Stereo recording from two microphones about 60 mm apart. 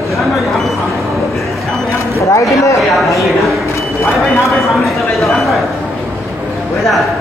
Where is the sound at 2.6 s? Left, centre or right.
Left.